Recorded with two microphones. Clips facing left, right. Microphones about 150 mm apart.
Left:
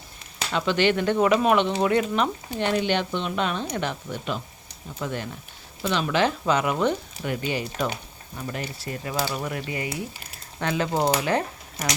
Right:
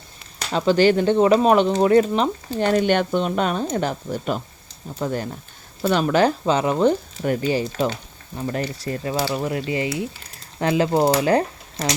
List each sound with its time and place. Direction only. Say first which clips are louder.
0.5 s speech: right 6 dB; 35° right (ahead or behind)
6.4 s speech: right 4 dB; 30° right (ahead or behind)
9.2 s speech: right 5 dB; 25° right (ahead or behind)